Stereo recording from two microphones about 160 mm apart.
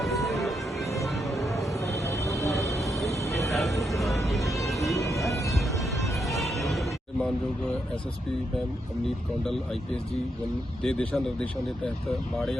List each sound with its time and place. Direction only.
0.0 s music: centre (ahead or behind)
1.9 s a sound: 20° left (ahead or behind)
3.5 s vehicle: centre (ahead or behind)
4.3 s music: centre (ahead or behind)
4.9 s music: 20° left (ahead or behind)
6.2 s music: centre (ahead or behind)
10.8 s speech: 5° left (ahead or behind)